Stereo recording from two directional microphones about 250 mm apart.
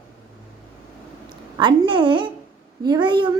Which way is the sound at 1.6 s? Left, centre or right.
Centre.